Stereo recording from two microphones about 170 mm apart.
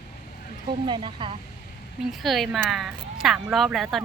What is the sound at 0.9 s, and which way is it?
Speech, 25° right (ahead or behind).